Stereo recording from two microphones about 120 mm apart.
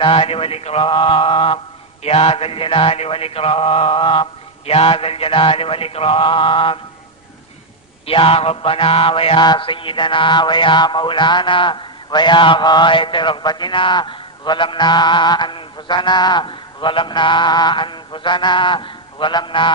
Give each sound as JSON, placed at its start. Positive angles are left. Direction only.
{"t": 0.0, "sound": "mantra", "side_deg": 50}
{"t": 8.0, "sound": "mantra", "side_deg": 50}